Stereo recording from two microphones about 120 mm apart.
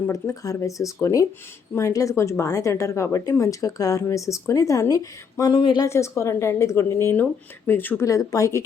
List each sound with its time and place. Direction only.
0.1 s a woman's voice: 25° left (ahead or behind)
5.8 s a woman's voice: 25° left (ahead or behind)